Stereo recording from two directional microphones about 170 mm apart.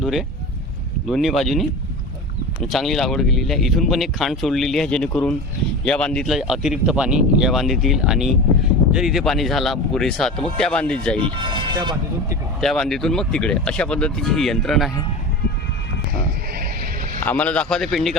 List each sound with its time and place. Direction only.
0.0 s speech: centre (ahead or behind)
11.2 s speech: 30° right (ahead or behind)
12.5 s speech: centre (ahead or behind)
17.2 s speech: 10° left (ahead or behind)